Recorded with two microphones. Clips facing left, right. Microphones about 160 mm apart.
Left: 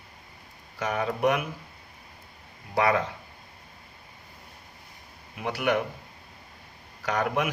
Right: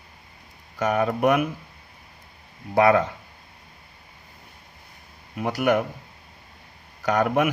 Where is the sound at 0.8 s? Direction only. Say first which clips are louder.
Right 5 dB; 50° right (ahead or behind).